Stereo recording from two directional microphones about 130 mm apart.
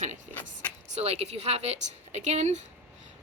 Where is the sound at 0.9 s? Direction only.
55° right (ahead or behind).